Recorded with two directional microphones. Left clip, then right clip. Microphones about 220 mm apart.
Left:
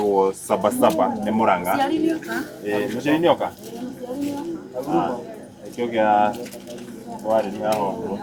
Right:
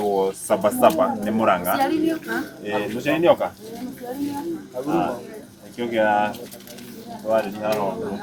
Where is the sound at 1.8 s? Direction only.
30° right (ahead or behind).